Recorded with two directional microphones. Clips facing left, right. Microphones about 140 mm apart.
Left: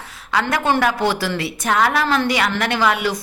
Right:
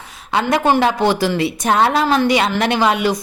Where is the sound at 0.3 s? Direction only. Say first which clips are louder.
Right 3 dB; 20° right (ahead or behind).